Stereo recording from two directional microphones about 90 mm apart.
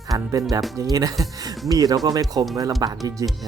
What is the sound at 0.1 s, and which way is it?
Speech, 40° right (ahead or behind).